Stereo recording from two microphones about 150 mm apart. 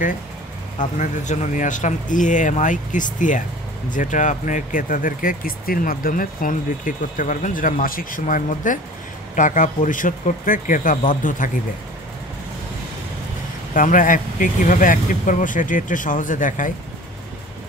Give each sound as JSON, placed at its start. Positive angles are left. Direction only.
{"t": 0.9, "sound": "speech", "side_deg": 50}
{"t": 13.7, "sound": "speech", "side_deg": 60}